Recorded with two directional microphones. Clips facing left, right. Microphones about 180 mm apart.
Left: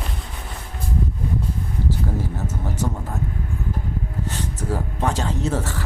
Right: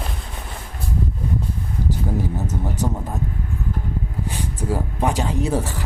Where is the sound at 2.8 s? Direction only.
15° right (ahead or behind).